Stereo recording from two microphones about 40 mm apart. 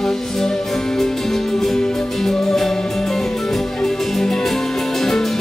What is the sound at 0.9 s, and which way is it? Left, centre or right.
Music, centre.